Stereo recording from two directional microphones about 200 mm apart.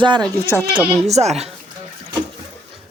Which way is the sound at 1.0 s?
35° right (ahead or behind).